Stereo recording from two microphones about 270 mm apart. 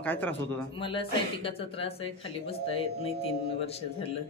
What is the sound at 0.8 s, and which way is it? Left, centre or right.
Speech, centre.